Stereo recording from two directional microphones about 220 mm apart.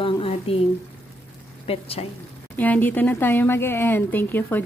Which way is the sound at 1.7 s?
25° left (ahead or behind).